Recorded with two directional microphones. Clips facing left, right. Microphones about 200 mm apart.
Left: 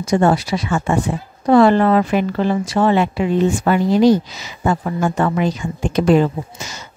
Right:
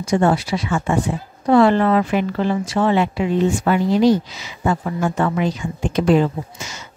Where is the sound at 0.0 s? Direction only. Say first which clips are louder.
Left 2 dB; 40° left (ahead or behind).